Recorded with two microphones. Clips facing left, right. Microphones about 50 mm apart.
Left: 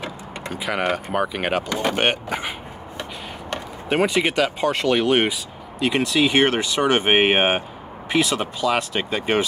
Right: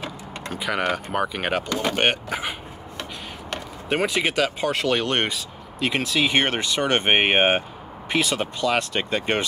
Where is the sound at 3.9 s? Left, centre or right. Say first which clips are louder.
Left 3 dB; centre.